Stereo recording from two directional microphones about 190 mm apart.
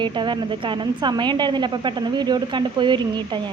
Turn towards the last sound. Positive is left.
turn(degrees=-25)  # may be behind; listen again after turning